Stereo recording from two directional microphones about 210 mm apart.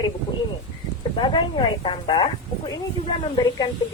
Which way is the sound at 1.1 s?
25° left (ahead or behind).